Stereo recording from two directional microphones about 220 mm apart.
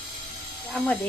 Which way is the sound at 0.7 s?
5° left (ahead or behind).